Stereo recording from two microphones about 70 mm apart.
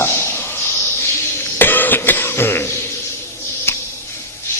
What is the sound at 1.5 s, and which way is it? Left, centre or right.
Cough, left.